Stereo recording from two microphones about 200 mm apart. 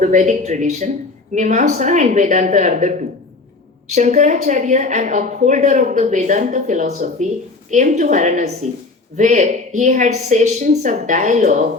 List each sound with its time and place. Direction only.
0.0 s a woman's voice: 40° right (ahead or behind)